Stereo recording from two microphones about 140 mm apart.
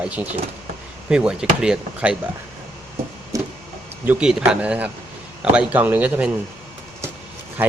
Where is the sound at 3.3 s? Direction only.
25° right (ahead or behind).